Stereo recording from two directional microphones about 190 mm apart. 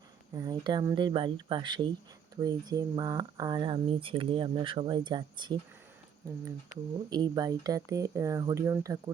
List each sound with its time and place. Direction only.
0.3 s speech: 20° right (ahead or behind)
7.1 s speech: 20° right (ahead or behind)